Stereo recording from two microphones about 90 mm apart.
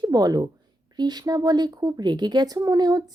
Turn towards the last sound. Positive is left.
turn(degrees=-45)  # may be behind; listen again after turning